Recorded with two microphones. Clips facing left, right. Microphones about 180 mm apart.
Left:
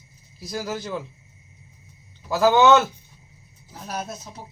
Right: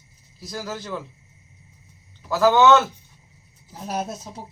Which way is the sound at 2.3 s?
15° left (ahead or behind).